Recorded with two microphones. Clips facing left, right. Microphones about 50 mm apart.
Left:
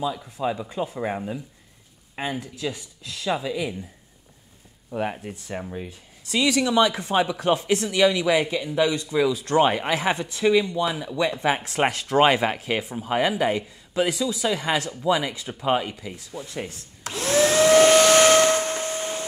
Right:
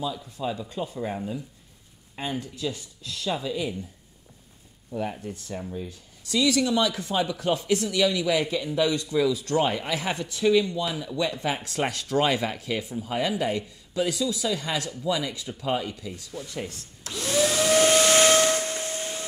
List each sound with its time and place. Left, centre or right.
0.1 s speech: left
4.9 s speech: left
8.4 s speech: centre
8.7 s speech: left
15.9 s speech: left
16.3 s speech: centre
16.5 s vacuum cleaner: left